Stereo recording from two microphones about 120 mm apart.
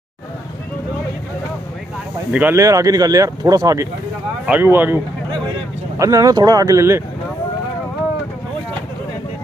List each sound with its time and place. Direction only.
2.3 s speech: 15° right (ahead or behind)
2.6 s speech: 30° right (ahead or behind)
4.5 s speech: 15° right (ahead or behind)
5.9 s speech: 30° right (ahead or behind)